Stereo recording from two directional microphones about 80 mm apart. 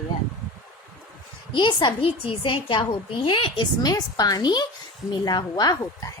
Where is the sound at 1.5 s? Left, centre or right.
Left.